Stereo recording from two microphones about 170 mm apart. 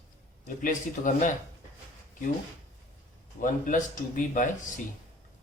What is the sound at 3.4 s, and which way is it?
Speech, 50° left (ahead or behind).